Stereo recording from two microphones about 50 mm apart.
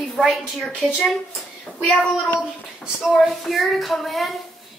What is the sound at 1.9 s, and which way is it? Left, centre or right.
Speech, left.